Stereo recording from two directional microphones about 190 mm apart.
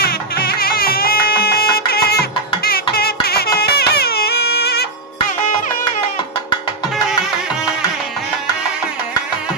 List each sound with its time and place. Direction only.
0.0 s music: 55° left (ahead or behind)